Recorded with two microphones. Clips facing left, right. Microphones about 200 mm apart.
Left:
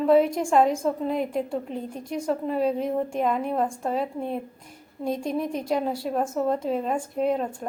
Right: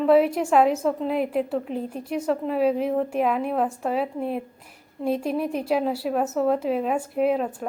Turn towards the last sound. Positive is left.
turn(degrees=-5)  # may be behind; listen again after turning